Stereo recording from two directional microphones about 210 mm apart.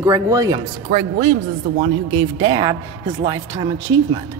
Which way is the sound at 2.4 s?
20° right (ahead or behind).